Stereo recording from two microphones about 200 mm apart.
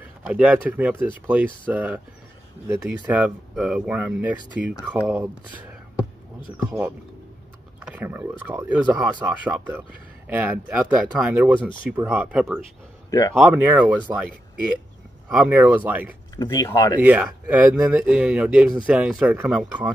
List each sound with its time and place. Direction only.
0.2 s speech: 5° right (ahead or behind)
7.8 s speech: 10° right (ahead or behind)
15.2 s speech: 5° right (ahead or behind)
16.3 s speech: 20° left (ahead or behind)
17.0 s speech: 10° right (ahead or behind)